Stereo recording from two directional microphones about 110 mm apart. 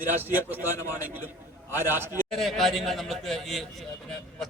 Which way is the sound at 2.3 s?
Centre (ahead or behind).